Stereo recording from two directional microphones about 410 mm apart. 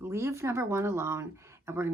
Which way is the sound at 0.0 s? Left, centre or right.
Centre.